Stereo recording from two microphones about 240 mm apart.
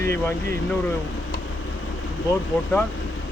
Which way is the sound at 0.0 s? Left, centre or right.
Centre.